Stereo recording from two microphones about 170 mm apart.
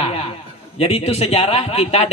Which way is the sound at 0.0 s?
35° left (ahead or behind).